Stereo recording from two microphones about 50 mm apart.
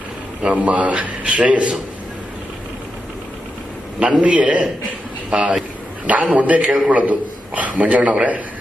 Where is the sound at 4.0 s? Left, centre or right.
Right.